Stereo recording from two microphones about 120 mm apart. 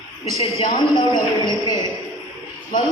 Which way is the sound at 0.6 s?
35° left (ahead or behind).